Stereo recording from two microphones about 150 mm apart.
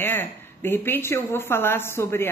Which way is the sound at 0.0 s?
15° left (ahead or behind).